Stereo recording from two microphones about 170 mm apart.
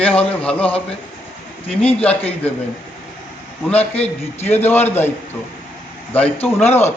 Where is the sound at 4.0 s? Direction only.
40° left (ahead or behind).